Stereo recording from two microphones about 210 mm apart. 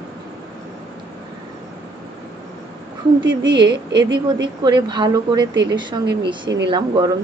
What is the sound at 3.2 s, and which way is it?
Speech, 60° right (ahead or behind).